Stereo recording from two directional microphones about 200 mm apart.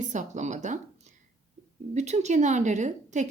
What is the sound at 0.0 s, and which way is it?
A woman's voice, 35° right (ahead or behind).